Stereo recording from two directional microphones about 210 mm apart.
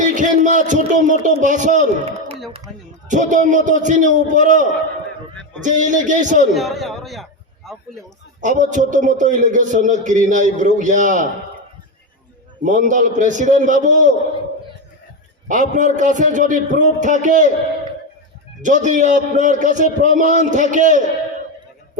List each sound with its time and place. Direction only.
0.0 s a man's voice: 35° right (ahead or behind)
5.6 s a man's voice: 35° right (ahead or behind)
6.5 s a man's voice: centre (ahead or behind)
8.4 s a man's voice: 35° right (ahead or behind)
12.6 s a man's voice: 35° right (ahead or behind)
15.4 s a man's voice: 35° right (ahead or behind)
18.6 s a man's voice: 35° right (ahead or behind)